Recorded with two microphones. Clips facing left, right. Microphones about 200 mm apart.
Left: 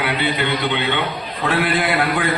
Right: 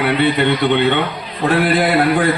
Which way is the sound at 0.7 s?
60° right (ahead or behind).